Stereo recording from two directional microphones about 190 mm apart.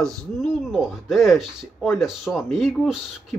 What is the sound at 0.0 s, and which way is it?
Speech, centre (ahead or behind).